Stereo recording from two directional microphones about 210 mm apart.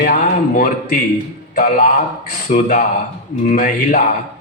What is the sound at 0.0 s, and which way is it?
Speech, 45° left (ahead or behind).